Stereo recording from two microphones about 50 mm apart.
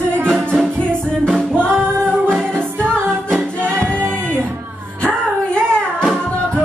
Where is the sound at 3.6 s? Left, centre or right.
Left.